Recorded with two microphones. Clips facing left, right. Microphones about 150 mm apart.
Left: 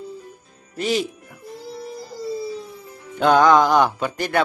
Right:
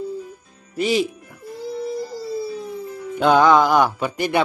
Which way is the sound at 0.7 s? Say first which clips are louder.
Right 3 dB; 5° right (ahead or behind).